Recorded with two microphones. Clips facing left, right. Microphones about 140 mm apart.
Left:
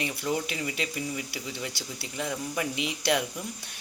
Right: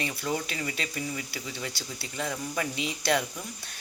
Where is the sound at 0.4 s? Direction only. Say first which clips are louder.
Left 2 dB; 15° left (ahead or behind).